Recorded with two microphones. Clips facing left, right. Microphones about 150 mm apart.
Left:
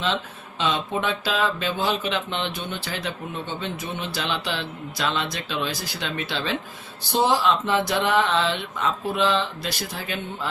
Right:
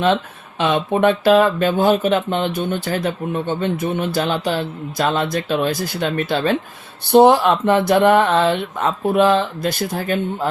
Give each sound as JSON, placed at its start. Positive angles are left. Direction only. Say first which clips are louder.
{"t": 0.6, "sound": "speech", "louder": "right 9 dB", "side_deg": -55}